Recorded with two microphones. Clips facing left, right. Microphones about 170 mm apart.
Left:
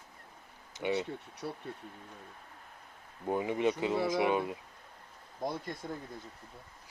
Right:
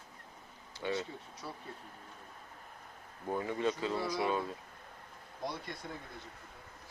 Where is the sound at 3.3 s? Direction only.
15° left (ahead or behind).